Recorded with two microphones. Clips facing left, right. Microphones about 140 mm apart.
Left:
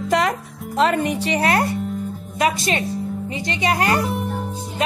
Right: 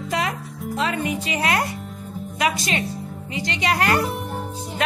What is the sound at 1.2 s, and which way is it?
Music, 35° left (ahead or behind).